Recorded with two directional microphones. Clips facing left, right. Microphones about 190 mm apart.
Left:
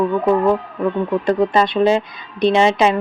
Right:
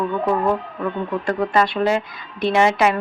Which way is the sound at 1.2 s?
20° left (ahead or behind).